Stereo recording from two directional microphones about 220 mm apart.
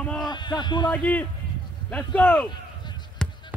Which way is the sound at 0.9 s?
5° left (ahead or behind).